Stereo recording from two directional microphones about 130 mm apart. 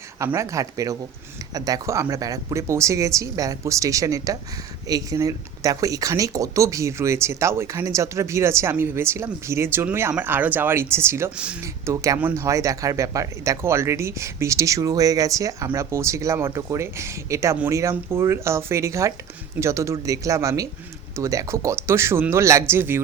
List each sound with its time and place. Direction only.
0.2 s speech: 20° right (ahead or behind)